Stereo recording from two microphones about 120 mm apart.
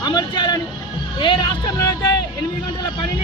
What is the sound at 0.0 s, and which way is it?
Speech, 35° left (ahead or behind).